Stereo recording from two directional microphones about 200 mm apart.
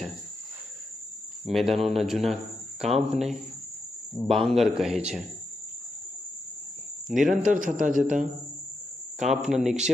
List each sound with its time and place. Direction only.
1.5 s speech: centre (ahead or behind)
7.1 s speech: centre (ahead or behind)
7.4 s a man's voice: 40° right (ahead or behind)
9.1 s speech: centre (ahead or behind)